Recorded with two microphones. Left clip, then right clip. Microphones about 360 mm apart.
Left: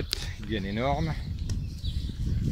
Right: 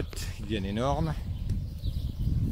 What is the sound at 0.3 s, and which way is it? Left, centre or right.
Speech, centre.